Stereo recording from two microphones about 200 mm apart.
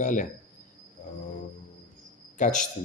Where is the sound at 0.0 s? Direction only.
40° left (ahead or behind).